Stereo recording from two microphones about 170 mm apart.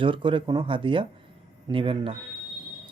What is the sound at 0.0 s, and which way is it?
Speech, 30° right (ahead or behind).